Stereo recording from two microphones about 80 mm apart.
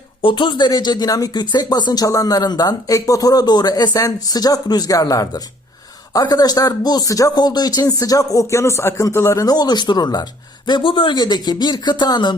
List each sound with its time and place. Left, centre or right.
0.2 s speech: left
2.0 s speech: left
9.6 s speech: left
10.7 s speech: left